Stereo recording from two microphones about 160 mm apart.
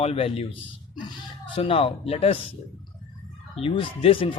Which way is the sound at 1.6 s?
35° left (ahead or behind).